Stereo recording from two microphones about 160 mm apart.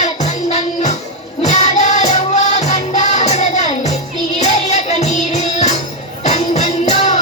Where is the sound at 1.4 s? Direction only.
45° left (ahead or behind).